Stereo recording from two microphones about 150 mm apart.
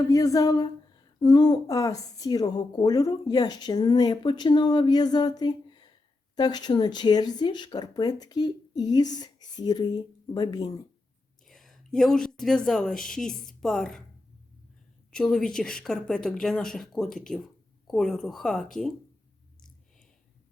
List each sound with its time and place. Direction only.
0.1 s a woman's voice: 25° left (ahead or behind)
11.4 s a woman's voice: centre (ahead or behind)
15.1 s speech: 5° left (ahead or behind)